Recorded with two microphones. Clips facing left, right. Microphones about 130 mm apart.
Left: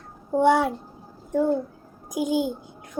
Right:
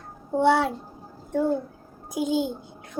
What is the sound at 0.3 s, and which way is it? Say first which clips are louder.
Speech: left 1 dB; 15° left (ahead or behind).